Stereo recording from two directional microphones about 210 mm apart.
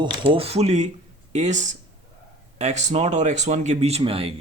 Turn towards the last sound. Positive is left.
turn(degrees=-25)  # may be behind; listen again after turning